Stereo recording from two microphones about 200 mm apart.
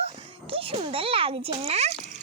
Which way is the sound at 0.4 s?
30° right (ahead or behind).